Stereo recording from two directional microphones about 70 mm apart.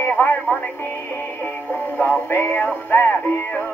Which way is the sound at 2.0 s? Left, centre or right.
Left.